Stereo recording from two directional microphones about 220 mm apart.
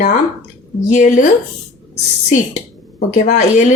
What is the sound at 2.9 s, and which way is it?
Speech, 35° left (ahead or behind).